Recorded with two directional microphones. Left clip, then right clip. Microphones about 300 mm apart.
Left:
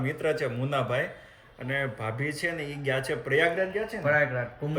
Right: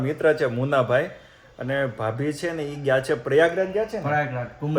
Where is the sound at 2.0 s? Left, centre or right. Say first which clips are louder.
Right 5 dB; centre.